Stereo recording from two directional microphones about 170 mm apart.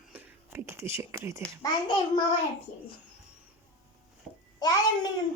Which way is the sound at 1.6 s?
25° left (ahead or behind).